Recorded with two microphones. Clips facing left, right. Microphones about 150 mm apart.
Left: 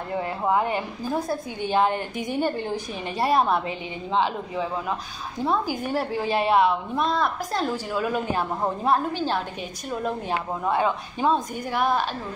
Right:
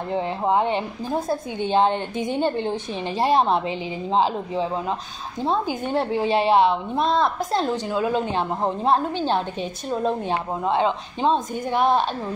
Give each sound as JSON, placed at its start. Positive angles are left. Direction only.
{"t": 0.1, "sound": "a woman's voice", "side_deg": -25}